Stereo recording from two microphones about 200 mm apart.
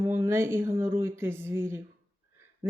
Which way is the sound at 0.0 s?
15° right (ahead or behind).